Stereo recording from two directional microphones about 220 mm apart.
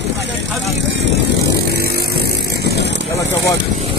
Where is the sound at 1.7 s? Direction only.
45° right (ahead or behind).